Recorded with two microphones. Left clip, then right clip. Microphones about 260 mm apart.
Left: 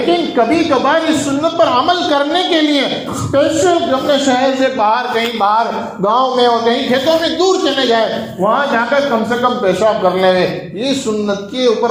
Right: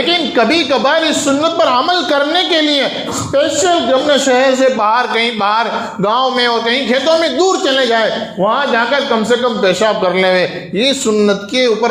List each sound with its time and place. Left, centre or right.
0.1 s a man's voice: right
1.4 s a man's voice: right